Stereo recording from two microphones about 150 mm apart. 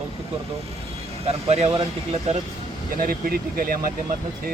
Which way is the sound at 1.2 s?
45° right (ahead or behind).